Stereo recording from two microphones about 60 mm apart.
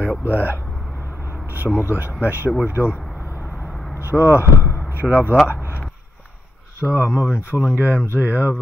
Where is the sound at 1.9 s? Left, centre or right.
Right.